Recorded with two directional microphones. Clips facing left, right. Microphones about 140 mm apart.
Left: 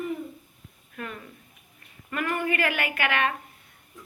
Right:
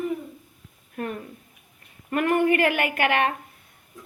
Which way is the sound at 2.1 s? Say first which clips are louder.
Right 7 dB; 55° right (ahead or behind).